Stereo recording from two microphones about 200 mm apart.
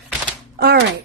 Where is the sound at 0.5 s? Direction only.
50° right (ahead or behind).